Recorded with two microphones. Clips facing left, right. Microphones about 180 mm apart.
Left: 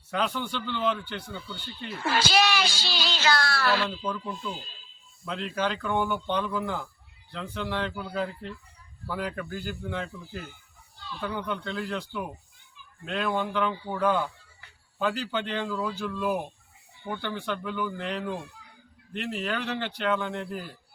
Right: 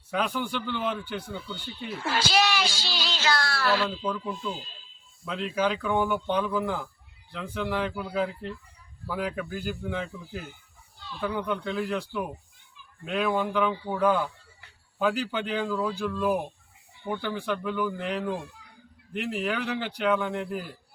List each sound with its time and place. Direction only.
0.1 s a man's voice: 5° right (ahead or behind)
2.0 s speech: 60° left (ahead or behind)
3.8 s speech: 5° right (ahead or behind)